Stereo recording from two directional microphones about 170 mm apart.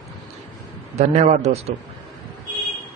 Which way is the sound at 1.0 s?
40° right (ahead or behind).